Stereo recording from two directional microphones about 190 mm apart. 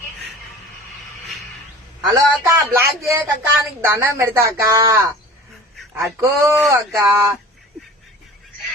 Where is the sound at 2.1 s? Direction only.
15° right (ahead or behind).